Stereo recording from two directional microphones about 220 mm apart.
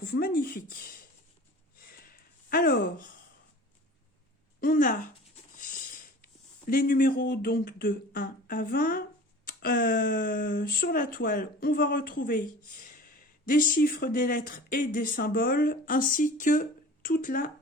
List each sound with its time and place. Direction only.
0.0 s speech: 45° left (ahead or behind)
1.8 s a sound: 40° left (ahead or behind)
4.6 s speech: 40° left (ahead or behind)